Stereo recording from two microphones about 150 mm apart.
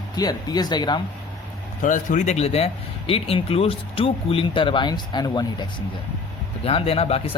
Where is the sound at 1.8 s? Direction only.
60° left (ahead or behind); by 5.6 s 25° left (ahead or behind).